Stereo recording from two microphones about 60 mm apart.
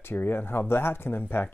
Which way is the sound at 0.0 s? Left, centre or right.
Left.